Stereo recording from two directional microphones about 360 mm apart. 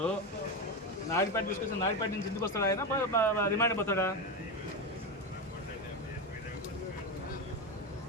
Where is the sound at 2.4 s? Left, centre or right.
Centre.